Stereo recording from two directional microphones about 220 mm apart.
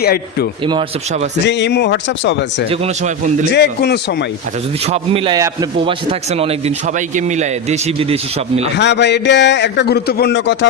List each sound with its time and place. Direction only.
0.0 s a man's voice: 45° left (ahead or behind)
0.6 s a man's voice: 20° right (ahead or behind)
1.5 s a man's voice: 50° left (ahead or behind)
2.6 s a man's voice: 30° right (ahead or behind)
3.5 s a man's voice: 50° left (ahead or behind)
4.9 s a man's voice: 25° right (ahead or behind)
8.7 s a man's voice: 50° left (ahead or behind)